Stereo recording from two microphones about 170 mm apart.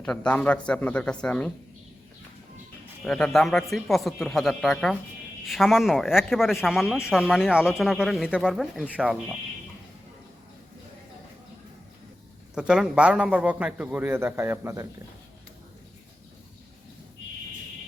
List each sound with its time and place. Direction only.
0.0 s speech: 5° left (ahead or behind)
3.0 s speech: 5° left (ahead or behind)
12.5 s a man's voice: 5° right (ahead or behind)